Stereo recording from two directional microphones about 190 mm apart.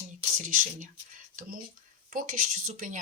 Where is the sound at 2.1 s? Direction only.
45° right (ahead or behind).